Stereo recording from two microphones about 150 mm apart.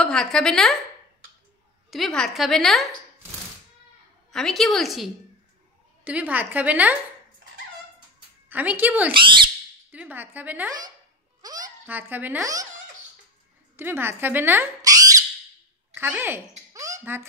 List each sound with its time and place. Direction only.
0.0 s a woman's voice: 5° left (ahead or behind)
1.9 s a woman's voice: centre (ahead or behind)
4.3 s a woman's voice: centre (ahead or behind)
8.5 s a woman's voice: 10° right (ahead or behind)
9.1 s a sound: 35° right (ahead or behind)
9.8 s a woman's voice: 10° right (ahead or behind)
11.4 s a sound: 25° right (ahead or behind)
11.8 s a woman's voice: 10° right (ahead or behind)
13.7 s speech: 15° right (ahead or behind)
15.9 s a sound: 15° right (ahead or behind)